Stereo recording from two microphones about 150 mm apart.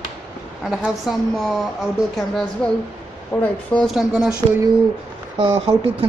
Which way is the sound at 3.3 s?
15° left (ahead or behind).